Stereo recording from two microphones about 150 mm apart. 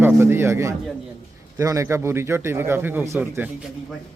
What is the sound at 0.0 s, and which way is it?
A man's voice, 15° right (ahead or behind).